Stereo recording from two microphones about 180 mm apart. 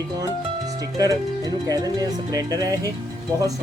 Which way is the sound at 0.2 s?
20° right (ahead or behind).